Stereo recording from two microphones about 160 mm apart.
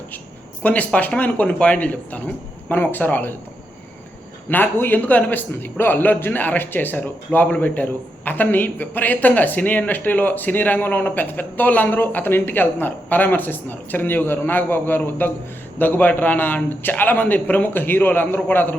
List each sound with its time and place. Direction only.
0.6 s a man's voice: 10° left (ahead or behind)
4.4 s a man's voice: 10° left (ahead or behind)